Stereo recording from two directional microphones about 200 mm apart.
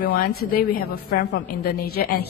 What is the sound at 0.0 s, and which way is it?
A woman's voice, 45° left (ahead or behind).